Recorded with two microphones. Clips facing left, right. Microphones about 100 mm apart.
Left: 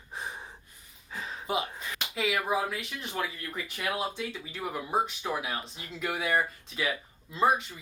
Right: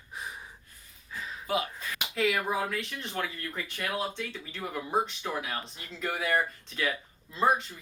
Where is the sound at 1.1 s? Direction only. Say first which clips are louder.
Even; 30° left (ahead or behind).